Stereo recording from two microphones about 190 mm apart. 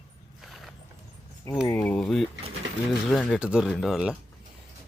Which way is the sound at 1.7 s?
5° left (ahead or behind).